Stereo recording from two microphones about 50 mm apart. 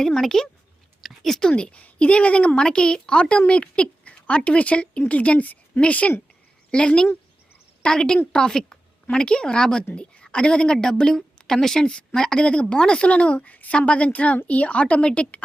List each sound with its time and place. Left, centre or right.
0.0 s a woman's voice: centre
1.0 s a sound: centre
1.4 s a woman's voice: centre
6.7 s a woman's voice: centre